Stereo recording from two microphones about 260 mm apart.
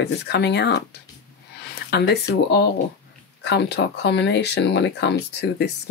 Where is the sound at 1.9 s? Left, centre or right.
Left.